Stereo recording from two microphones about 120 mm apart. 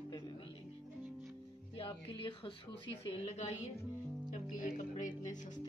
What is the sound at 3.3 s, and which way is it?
Speech, 70° left (ahead or behind).